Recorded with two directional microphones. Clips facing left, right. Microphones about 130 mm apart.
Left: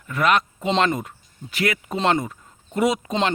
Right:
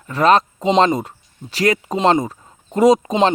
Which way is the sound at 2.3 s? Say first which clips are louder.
Right 4 dB; 35° right (ahead or behind).